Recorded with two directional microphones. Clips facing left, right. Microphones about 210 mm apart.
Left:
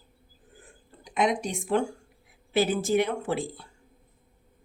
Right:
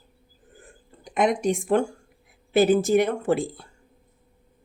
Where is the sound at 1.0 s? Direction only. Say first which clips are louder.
Right 4 dB; 50° right (ahead or behind).